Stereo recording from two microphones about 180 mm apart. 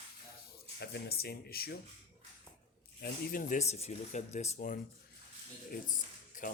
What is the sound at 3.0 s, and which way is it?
Speech, 60° left (ahead or behind).